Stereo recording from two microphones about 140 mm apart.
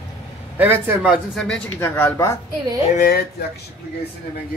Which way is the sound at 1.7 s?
15° left (ahead or behind).